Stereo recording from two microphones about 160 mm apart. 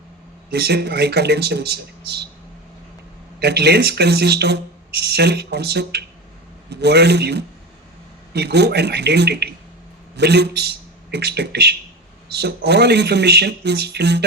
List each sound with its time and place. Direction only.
0.5 s speech: 90° right
3.4 s a man's voice: 90° right